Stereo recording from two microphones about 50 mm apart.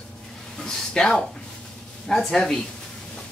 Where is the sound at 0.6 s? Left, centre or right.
Centre.